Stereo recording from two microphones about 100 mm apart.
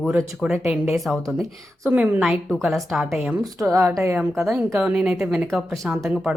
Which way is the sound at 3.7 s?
30° right (ahead or behind).